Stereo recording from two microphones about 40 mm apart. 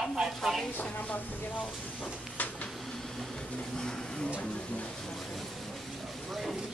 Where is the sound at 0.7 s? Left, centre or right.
Left.